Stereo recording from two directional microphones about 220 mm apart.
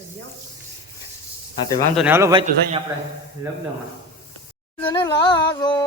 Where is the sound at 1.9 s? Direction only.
10° right (ahead or behind).